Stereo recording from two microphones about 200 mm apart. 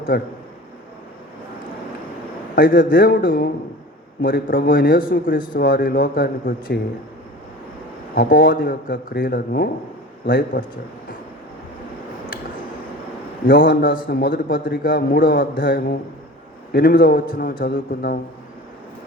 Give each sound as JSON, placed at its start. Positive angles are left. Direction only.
{"t": 0.1, "sound": "a man's voice", "side_deg": 55}
{"t": 2.6, "sound": "a man's voice", "side_deg": 45}
{"t": 8.1, "sound": "a man's voice", "side_deg": 45}
{"t": 13.5, "sound": "a man's voice", "side_deg": 45}